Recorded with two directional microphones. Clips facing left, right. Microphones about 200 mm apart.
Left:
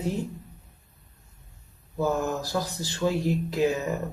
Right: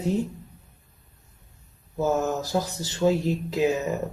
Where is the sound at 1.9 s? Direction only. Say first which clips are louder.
Right 2 dB; 20° right (ahead or behind).